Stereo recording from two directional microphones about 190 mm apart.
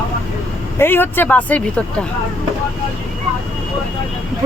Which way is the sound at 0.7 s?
10° left (ahead or behind).